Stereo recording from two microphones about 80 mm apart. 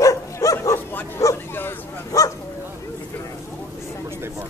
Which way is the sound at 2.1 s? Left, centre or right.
Left.